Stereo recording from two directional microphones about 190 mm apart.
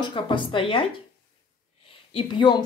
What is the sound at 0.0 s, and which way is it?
Speech, 25° left (ahead or behind).